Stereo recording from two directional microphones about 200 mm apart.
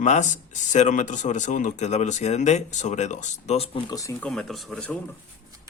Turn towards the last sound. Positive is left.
turn(degrees=5)  # may be behind; listen again after turning